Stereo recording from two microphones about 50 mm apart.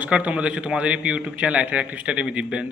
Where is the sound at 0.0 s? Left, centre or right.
Right.